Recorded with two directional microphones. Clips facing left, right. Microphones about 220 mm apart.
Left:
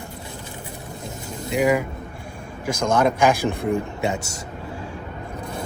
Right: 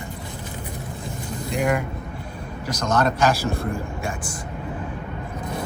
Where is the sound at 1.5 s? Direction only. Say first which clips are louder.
Left 3 dB; 5° left (ahead or behind).